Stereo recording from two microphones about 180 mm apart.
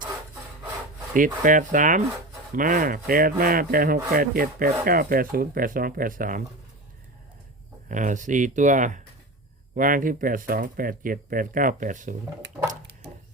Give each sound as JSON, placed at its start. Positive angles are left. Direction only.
{"t": 1.1, "sound": "speech", "side_deg": -50}
{"t": 7.9, "sound": "speech", "side_deg": -45}